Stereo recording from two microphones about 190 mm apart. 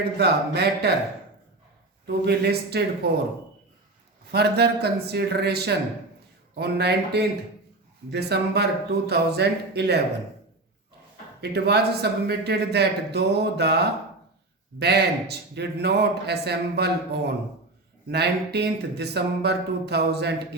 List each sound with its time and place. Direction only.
0.2 s a man's voice: 60° right (ahead or behind)
2.0 s a man's voice: 55° right (ahead or behind)
4.3 s a man's voice: 60° right (ahead or behind)
11.3 s a man's voice: 60° right (ahead or behind)